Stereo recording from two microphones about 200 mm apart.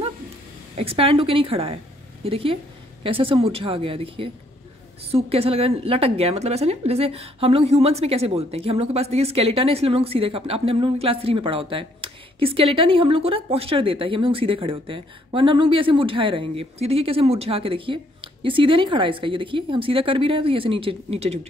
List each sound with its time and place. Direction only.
0.7 s a woman's voice: 30° right (ahead or behind)